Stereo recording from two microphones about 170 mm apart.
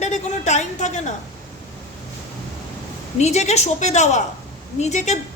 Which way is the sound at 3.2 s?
40° left (ahead or behind).